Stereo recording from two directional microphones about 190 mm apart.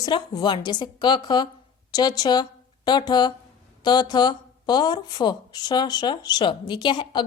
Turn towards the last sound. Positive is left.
turn(degrees=25)  # may be behind; listen again after turning